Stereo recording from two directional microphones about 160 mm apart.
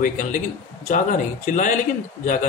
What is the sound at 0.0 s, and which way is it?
Speech, 55° left (ahead or behind).